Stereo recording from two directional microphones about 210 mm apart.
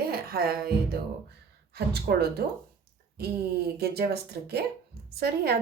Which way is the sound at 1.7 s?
50° right (ahead or behind).